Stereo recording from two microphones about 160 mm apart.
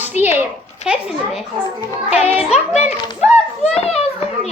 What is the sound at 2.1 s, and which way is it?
A child's voice, 40° left (ahead or behind).